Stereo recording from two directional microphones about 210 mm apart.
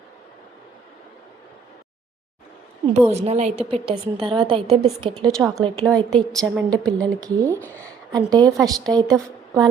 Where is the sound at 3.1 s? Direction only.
30° right (ahead or behind).